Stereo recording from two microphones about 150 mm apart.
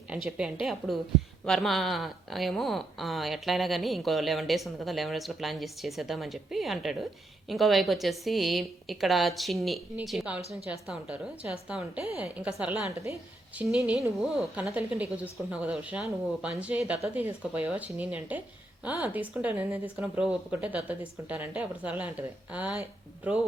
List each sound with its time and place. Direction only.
0.1 s speech: 5° right (ahead or behind)